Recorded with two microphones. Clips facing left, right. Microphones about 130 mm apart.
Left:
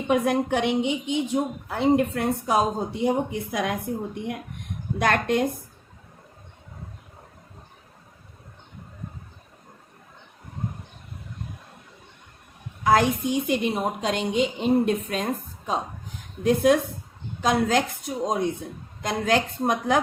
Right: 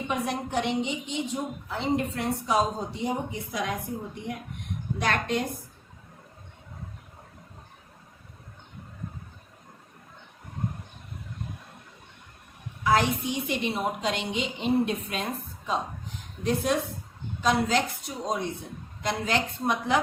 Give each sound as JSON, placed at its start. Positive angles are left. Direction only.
{"t": 0.1, "sound": "a woman's voice", "side_deg": 60}
{"t": 4.9, "sound": "a woman's voice", "side_deg": 55}
{"t": 12.8, "sound": "a woman's voice", "side_deg": 50}